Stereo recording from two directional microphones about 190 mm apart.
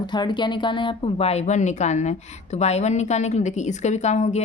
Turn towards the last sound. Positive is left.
turn(degrees=35)  # may be behind; listen again after turning